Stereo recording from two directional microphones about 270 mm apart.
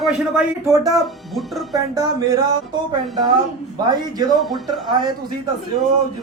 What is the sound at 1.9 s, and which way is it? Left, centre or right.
Speech, centre.